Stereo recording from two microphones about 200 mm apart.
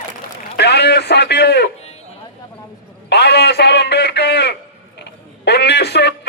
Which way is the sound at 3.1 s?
55° left (ahead or behind).